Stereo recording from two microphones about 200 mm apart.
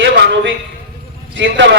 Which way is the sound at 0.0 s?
60° right (ahead or behind).